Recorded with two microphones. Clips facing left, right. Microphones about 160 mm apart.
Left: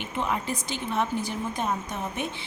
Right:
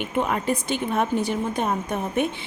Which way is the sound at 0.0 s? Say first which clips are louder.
Right 5 dB; 55° right (ahead or behind).